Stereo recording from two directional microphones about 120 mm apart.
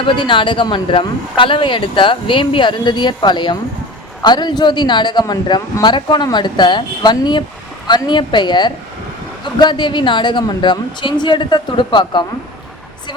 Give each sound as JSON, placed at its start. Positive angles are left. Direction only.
{"t": 0.1, "sound": "speech", "side_deg": 45}